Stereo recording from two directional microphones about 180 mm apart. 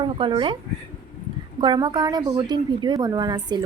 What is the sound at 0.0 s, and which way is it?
Speech, 25° right (ahead or behind).